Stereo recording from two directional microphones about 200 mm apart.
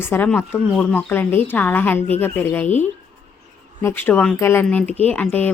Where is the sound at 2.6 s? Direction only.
35° left (ahead or behind).